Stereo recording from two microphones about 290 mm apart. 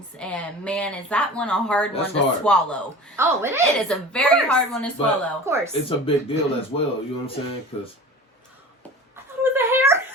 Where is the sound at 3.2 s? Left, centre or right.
Centre.